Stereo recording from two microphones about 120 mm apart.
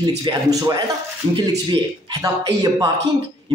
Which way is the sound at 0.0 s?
35° right (ahead or behind).